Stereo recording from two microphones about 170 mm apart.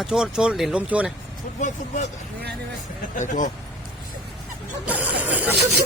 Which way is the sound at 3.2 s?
50° left (ahead or behind).